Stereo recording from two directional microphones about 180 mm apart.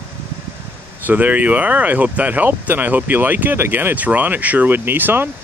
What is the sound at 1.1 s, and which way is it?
Speech, 10° right (ahead or behind).